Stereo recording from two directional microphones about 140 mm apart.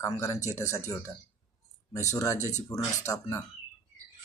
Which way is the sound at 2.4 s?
55° left (ahead or behind).